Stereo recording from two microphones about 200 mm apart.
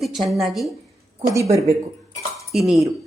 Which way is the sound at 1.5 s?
15° right (ahead or behind).